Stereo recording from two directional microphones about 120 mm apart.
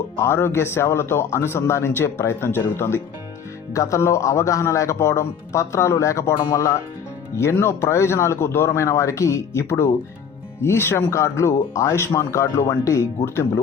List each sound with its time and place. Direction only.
0.3 s speech: 20° left (ahead or behind)